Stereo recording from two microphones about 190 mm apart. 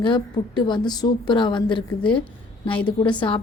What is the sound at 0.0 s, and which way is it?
A woman's voice, 25° left (ahead or behind).